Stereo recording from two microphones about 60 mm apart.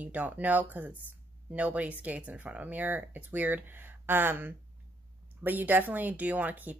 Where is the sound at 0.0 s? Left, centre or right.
Right.